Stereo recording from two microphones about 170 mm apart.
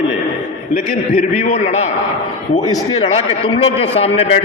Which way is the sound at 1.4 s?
45° left (ahead or behind).